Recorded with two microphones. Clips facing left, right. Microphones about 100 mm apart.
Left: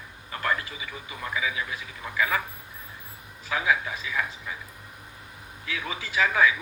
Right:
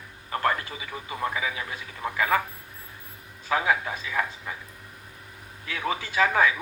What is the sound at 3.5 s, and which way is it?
A man's voice, 40° right (ahead or behind).